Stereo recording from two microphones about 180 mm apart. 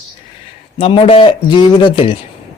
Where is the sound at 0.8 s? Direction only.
30° left (ahead or behind).